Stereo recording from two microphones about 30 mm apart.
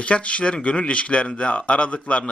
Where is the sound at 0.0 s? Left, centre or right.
Left.